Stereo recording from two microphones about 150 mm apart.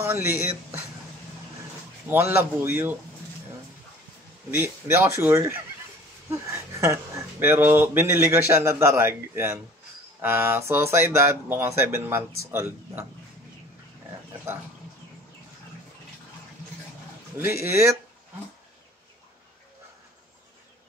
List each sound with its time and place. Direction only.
0.0 s speech: 15° right (ahead or behind)
2.0 s speech: 15° right (ahead or behind)
4.5 s speech: 15° right (ahead or behind)
17.4 s speech: 15° right (ahead or behind)